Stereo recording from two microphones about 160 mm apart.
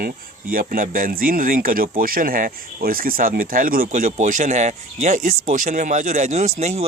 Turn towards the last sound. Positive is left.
turn(degrees=-40)  # may be behind; listen again after turning